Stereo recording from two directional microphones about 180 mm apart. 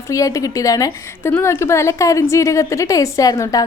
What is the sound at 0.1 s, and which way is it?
A woman's voice, 20° left (ahead or behind).